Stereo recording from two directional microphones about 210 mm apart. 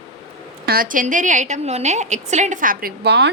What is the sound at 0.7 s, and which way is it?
A woman's voice, 40° right (ahead or behind).